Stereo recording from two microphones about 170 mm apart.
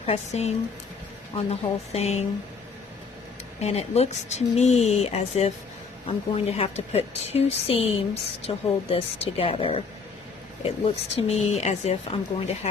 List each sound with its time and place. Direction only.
0.0 s a woman's voice: 40° left (ahead or behind)
3.6 s a woman's voice: 40° left (ahead or behind)
10.8 s a woman's voice: 35° left (ahead or behind)